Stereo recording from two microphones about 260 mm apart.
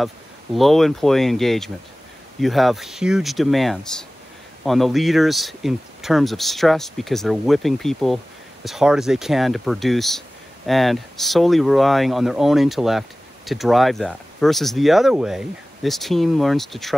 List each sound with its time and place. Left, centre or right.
0.6 s speech: centre